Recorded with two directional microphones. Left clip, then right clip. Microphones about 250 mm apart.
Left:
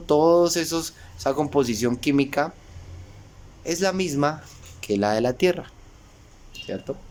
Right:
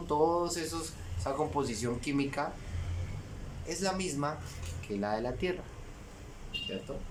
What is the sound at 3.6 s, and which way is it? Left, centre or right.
Speech, left.